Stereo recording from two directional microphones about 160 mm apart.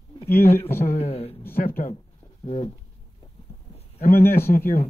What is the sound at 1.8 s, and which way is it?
Speech, 70° left (ahead or behind).